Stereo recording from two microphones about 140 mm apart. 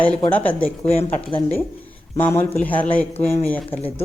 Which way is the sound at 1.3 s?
35° left (ahead or behind).